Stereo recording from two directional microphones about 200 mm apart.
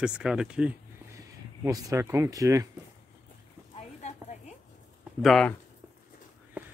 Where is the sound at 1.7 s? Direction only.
15° right (ahead or behind).